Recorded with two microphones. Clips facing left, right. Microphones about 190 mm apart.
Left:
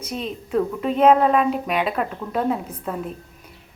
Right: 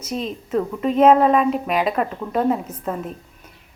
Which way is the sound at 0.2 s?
Centre (ahead or behind).